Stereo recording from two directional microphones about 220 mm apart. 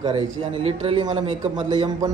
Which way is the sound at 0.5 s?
25° right (ahead or behind).